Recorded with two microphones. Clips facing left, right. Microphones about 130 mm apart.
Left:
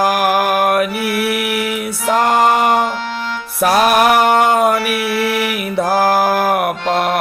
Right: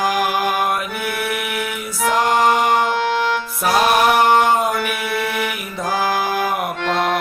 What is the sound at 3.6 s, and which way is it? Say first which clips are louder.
Music: left 4 dB; 65° left (ahead or behind).